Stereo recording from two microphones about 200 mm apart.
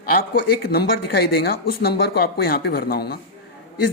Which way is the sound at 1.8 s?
50° left (ahead or behind).